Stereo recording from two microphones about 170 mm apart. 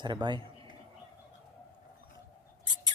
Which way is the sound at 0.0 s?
25° right (ahead or behind).